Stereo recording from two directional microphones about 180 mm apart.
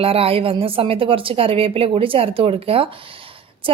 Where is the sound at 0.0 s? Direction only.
30° right (ahead or behind).